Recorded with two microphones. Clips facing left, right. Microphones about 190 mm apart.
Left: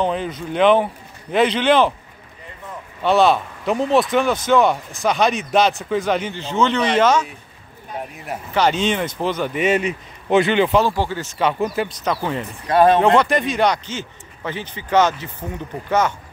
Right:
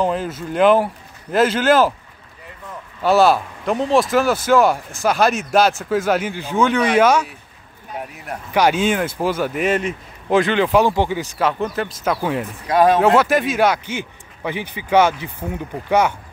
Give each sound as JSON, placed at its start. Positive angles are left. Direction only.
{"t": 0.0, "sound": "speech", "side_deg": -5}
{"t": 3.0, "sound": "speech", "side_deg": -5}
{"t": 8.5, "sound": "speech", "side_deg": -10}
{"t": 10.8, "sound": "speech", "side_deg": -15}
{"t": 11.6, "sound": "speech", "side_deg": 10}
{"t": 12.0, "sound": "speech", "side_deg": -5}